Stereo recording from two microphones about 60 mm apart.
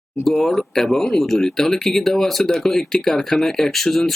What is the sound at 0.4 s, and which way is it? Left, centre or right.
Speech, centre.